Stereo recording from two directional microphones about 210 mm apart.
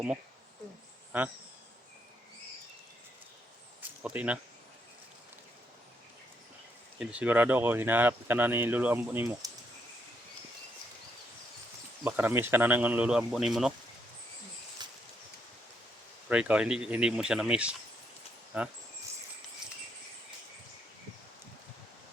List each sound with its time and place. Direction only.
1.1 s speech: 5° right (ahead or behind)
3.8 s a sound: 5° right (ahead or behind)
7.0 s speech: 5° right (ahead or behind)
12.0 s speech: 10° right (ahead or behind)
14.8 s a sound: 20° right (ahead or behind)
16.3 s speech: 5° right (ahead or behind)